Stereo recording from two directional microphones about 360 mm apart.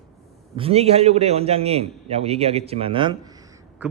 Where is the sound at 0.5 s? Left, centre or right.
Centre.